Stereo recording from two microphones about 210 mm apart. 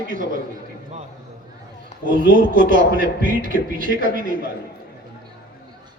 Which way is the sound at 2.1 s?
40° right (ahead or behind).